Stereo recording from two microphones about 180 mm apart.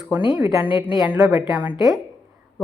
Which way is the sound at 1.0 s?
10° right (ahead or behind).